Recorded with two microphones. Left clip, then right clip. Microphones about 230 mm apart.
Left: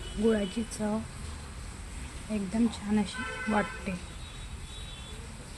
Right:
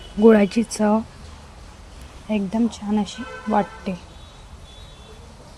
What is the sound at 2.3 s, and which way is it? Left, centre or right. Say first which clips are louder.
Speech: right 8 dB; right.